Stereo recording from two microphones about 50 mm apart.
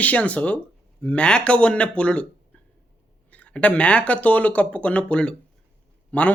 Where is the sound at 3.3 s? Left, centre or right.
Left.